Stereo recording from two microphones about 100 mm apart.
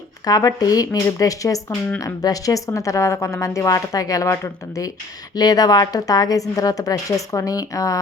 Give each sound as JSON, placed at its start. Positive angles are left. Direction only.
{"t": 0.3, "sound": "a woman's voice", "side_deg": 40}
{"t": 5.4, "sound": "a woman's voice", "side_deg": 40}